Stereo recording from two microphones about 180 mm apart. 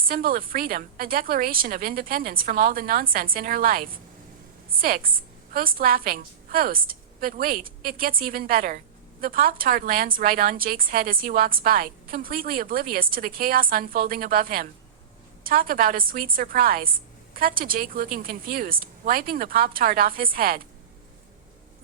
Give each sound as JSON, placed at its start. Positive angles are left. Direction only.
{"t": 0.0, "sound": "speech", "side_deg": -55}